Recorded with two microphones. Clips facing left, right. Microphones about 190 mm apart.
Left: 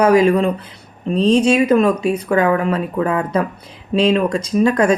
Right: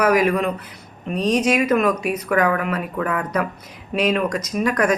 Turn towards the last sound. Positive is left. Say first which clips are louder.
# left 5 dB
turn(degrees=25)  # may be behind; listen again after turning